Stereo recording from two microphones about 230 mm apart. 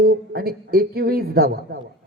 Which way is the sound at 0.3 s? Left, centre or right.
Right.